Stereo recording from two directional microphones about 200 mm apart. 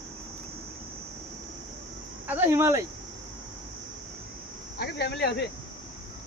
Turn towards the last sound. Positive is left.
turn(degrees=55)  # may be behind; listen again after turning